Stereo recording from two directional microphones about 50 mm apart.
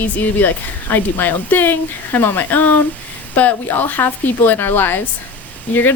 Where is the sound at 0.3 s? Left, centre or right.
Left.